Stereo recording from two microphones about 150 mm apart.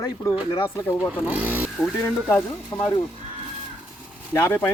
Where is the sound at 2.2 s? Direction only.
15° left (ahead or behind).